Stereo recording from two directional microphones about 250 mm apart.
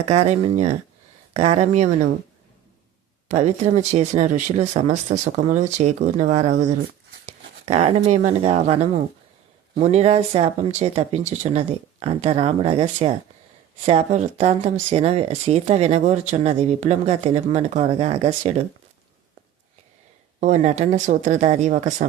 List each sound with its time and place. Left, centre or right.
0.1 s speech: right
3.2 s speech: right
20.4 s speech: right